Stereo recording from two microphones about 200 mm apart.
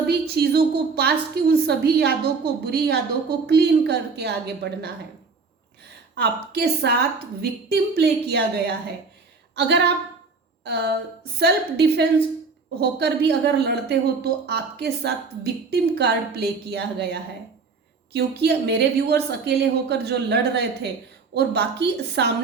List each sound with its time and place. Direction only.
0.1 s a woman's voice: 55° right (ahead or behind)
6.1 s a woman's voice: 55° right (ahead or behind)